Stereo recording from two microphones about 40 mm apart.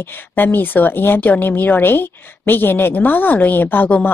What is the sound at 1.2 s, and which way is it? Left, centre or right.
A woman's voice, left.